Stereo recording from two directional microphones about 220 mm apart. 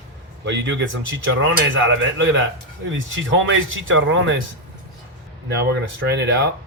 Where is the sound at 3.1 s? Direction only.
60° right (ahead or behind).